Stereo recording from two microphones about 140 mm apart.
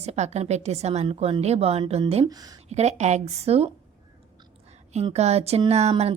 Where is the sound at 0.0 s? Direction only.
50° right (ahead or behind).